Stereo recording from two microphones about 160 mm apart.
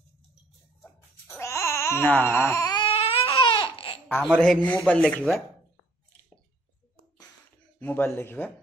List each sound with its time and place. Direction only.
0.8 s baby cry: 10° left (ahead or behind)
2.9 s baby cry: 35° left (ahead or behind)
4.2 s speech: 5° left (ahead or behind)
7.8 s speech: 15° left (ahead or behind)